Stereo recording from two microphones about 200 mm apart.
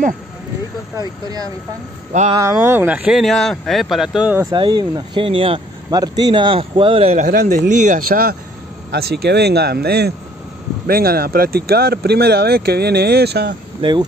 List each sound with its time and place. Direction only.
0.9 s speech: 20° right (ahead or behind)
4.5 s speech: 25° right (ahead or behind); by 13.6 s 55° right (ahead or behind)
13.7 s speech: 25° right (ahead or behind)